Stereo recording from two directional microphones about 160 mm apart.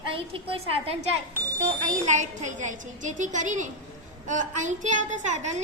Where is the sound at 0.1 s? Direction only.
35° right (ahead or behind).